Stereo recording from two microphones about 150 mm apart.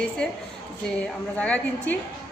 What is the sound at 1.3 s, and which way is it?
Speech, 10° left (ahead or behind).